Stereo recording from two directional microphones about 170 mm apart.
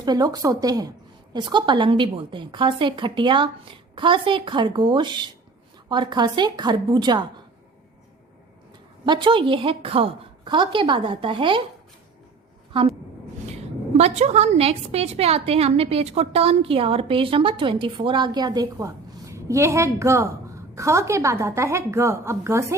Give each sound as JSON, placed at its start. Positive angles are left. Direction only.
{"t": 0.0, "sound": "a woman's voice", "side_deg": -25}
{"t": 9.0, "sound": "a woman's voice", "side_deg": -30}
{"t": 12.7, "sound": "a woman's voice", "side_deg": -30}
{"t": 13.9, "sound": "a woman's voice", "side_deg": -40}